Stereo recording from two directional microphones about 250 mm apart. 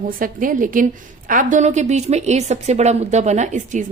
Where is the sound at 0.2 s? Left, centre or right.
Right.